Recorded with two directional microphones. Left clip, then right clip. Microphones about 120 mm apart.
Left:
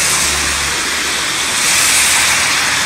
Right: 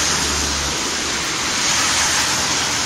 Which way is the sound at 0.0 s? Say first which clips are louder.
Left 5 dB; 25° left (ahead or behind).